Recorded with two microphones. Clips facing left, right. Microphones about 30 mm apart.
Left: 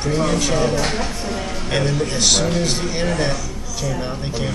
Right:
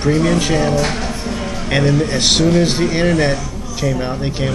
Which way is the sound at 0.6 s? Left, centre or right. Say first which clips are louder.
Right 3 dB; centre.